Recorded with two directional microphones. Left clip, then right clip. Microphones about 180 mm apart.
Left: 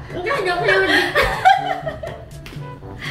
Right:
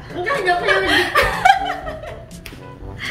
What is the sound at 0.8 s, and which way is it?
Chuckle, 75° right (ahead or behind).